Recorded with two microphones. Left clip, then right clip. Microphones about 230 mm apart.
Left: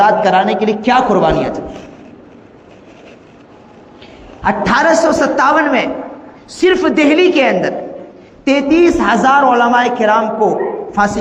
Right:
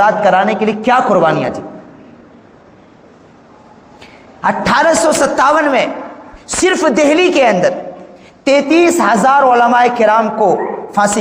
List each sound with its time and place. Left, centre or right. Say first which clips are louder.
0.0 s a man's voice: even; right
4.4 s a man's voice: right 1 dB; right